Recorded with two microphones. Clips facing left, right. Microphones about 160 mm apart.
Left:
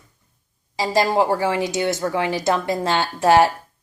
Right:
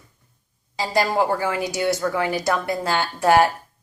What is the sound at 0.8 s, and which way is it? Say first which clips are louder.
Speech: left 2 dB; 20° left (ahead or behind).